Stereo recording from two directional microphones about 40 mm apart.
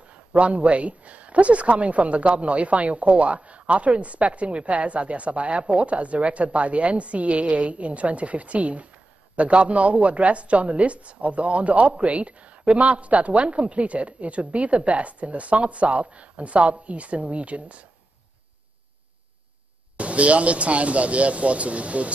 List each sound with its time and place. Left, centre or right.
0.1 s speech: right
20.0 s speech: right